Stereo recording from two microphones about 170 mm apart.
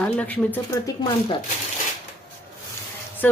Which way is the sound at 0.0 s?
10° left (ahead or behind).